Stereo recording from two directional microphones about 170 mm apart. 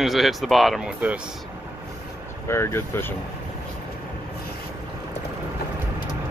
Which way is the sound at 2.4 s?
15° left (ahead or behind).